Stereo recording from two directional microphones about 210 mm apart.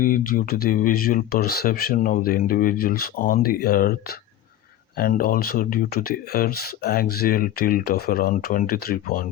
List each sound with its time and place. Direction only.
0.0 s speech: 40° left (ahead or behind)
4.9 s speech: 45° left (ahead or behind)